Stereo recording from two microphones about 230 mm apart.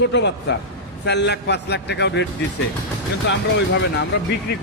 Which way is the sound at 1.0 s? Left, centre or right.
Left.